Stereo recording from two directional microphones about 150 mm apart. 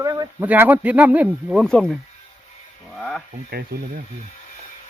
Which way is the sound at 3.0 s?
5° left (ahead or behind).